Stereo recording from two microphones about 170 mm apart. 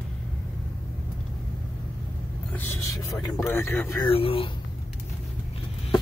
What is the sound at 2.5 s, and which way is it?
Speech, 15° left (ahead or behind).